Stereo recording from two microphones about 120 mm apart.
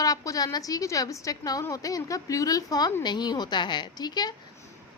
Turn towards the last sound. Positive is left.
turn(degrees=35)  # may be behind; listen again after turning